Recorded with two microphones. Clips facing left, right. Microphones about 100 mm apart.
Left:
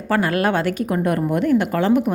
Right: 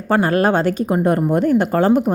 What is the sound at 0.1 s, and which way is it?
A woman's voice, 35° right (ahead or behind).